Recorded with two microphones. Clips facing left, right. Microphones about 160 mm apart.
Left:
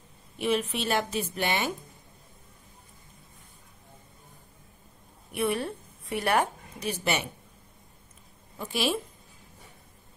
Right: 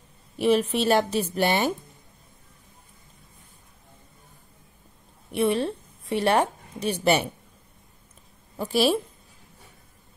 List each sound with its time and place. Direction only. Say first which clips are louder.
0.4 s a woman's voice: right 6 dB; 35° right (ahead or behind)
5.3 s a woman's voice: right 5 dB; 25° right (ahead or behind)
8.5 s a woman's voice: right 7 dB; 35° right (ahead or behind)